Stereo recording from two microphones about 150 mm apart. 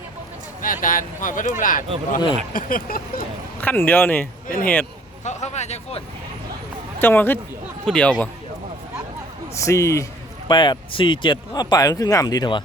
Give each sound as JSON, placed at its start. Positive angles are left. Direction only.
{"t": 0.6, "sound": "speech", "side_deg": 65}
{"t": 3.6, "sound": "speech", "side_deg": 10}
{"t": 4.4, "sound": "speech", "side_deg": 65}
{"t": 5.2, "sound": "speech", "side_deg": 50}
{"t": 7.0, "sound": "speech", "side_deg": 15}
{"t": 9.6, "sound": "speech", "side_deg": 20}
{"t": 10.5, "sound": "speech", "side_deg": 30}